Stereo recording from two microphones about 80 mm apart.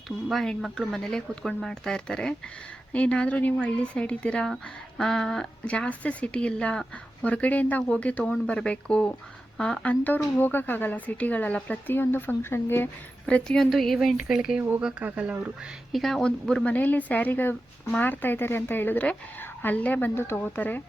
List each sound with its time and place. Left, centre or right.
0.3 s a woman's voice: centre; by 12.9 s left
13.2 s speech: centre
13.7 s speech: centre
15.9 s speech: centre
16.7 s a woman's voice: left